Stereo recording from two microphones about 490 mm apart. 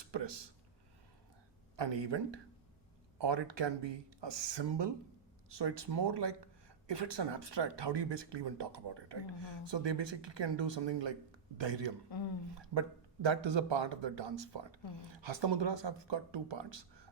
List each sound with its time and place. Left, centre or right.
0.1 s speech: right
1.7 s speech: right
13.2 s speech: right